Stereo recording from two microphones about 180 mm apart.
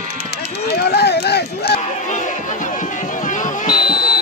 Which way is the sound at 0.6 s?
65° left (ahead or behind).